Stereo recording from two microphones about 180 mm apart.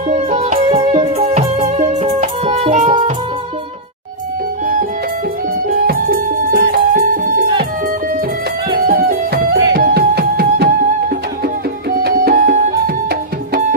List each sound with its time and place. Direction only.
0.1 s music: 35° right (ahead or behind)
0.7 s music: 25° right (ahead or behind)
5.7 s music: 55° right (ahead or behind)
8.7 s music: 55° right (ahead or behind)
11.9 s music: 50° right (ahead or behind)